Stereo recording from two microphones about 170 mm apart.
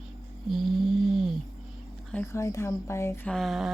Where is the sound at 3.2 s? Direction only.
Centre (ahead or behind).